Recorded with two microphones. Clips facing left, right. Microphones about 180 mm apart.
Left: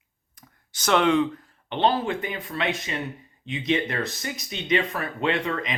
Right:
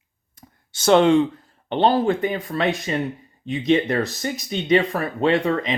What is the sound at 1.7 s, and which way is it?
Speech, 40° right (ahead or behind).